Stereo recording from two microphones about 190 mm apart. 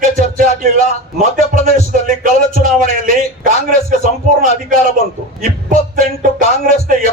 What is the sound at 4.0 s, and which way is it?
Speech, 35° left (ahead or behind).